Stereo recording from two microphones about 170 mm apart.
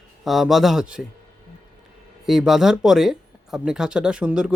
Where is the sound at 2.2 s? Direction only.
Centre (ahead or behind).